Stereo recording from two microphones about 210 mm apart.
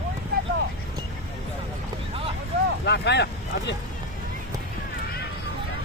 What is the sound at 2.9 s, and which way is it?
Speech, 55° left (ahead or behind).